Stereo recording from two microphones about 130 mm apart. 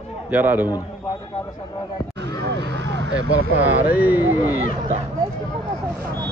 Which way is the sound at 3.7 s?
15° right (ahead or behind).